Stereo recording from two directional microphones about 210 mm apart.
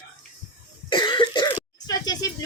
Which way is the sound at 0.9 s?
20° left (ahead or behind).